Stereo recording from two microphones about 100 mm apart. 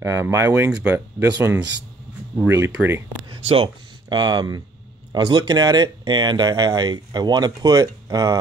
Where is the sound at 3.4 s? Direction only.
75° right (ahead or behind).